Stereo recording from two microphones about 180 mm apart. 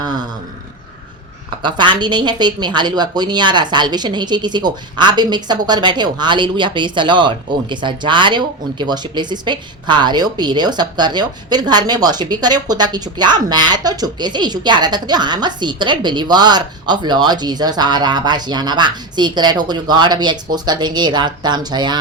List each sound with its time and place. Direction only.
0.0 s speech: 25° right (ahead or behind)
1.6 s speech: 25° right (ahead or behind)